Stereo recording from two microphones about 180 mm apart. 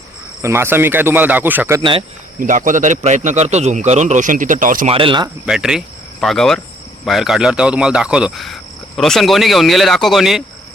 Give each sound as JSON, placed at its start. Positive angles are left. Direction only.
{"t": 0.4, "sound": "speech", "side_deg": -15}
{"t": 1.8, "sound": "speech", "side_deg": -30}
{"t": 2.4, "sound": "a man's voice", "side_deg": -45}
{"t": 4.9, "sound": "speech", "side_deg": -30}
{"t": 5.5, "sound": "cricket", "side_deg": -5}
{"t": 7.0, "sound": "speech", "side_deg": 0}